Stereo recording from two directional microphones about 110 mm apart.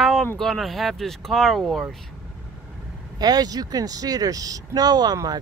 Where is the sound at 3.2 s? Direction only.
35° right (ahead or behind).